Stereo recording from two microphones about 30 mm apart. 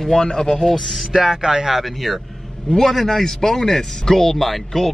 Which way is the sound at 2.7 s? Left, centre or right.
Centre.